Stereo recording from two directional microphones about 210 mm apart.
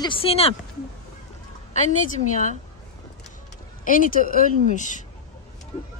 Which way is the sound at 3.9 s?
40° left (ahead or behind).